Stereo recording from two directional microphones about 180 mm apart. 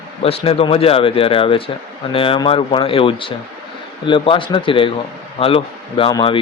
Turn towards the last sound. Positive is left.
turn(degrees=25)  # may be behind; listen again after turning